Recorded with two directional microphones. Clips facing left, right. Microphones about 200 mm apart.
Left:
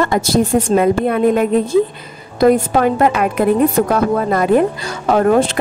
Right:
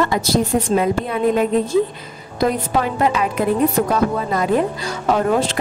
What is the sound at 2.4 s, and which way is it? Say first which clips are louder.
A woman's voice: left 7 dB; 50° left (ahead or behind).